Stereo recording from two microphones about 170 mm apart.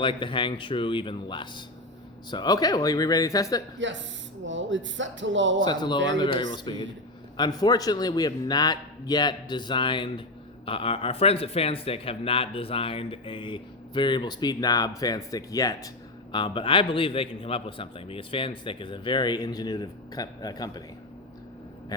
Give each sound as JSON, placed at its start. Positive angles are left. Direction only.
{"t": 0.0, "sound": "a man's voice", "side_deg": 30}
{"t": 3.8, "sound": "speech", "side_deg": -90}
{"t": 5.6, "sound": "a man's voice", "side_deg": 25}